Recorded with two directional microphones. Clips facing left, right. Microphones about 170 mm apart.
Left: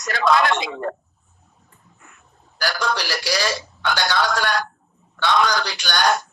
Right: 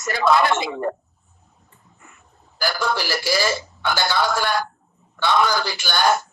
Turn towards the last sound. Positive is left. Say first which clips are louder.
# right 1 dB
turn(degrees=-5)  # may be behind; listen again after turning